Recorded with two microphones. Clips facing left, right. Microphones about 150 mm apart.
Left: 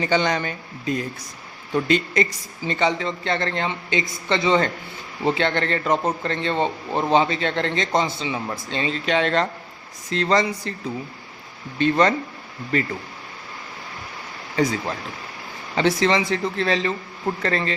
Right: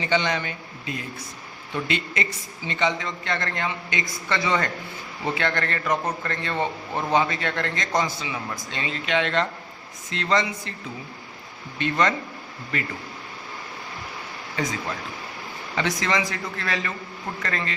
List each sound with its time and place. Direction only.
0.0 s a man's voice: 40° left (ahead or behind)
11.8 s speech: 35° left (ahead or behind)
14.5 s a man's voice: 35° left (ahead or behind)